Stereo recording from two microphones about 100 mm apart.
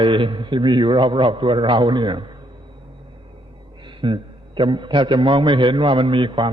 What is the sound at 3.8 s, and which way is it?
A man's voice, 55° right (ahead or behind).